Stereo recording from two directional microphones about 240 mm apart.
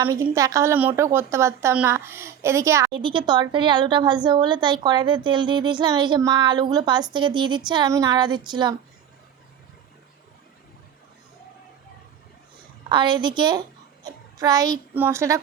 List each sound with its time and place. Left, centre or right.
0.0 s a woman's voice: centre
12.9 s a woman's voice: centre